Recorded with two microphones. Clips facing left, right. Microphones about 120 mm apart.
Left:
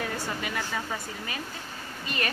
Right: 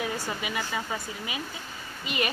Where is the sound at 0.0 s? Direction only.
10° right (ahead or behind).